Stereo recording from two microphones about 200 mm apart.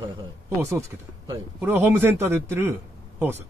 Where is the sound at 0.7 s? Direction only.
15° right (ahead or behind).